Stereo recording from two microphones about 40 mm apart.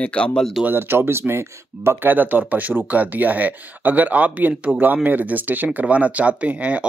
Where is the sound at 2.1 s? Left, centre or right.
Right.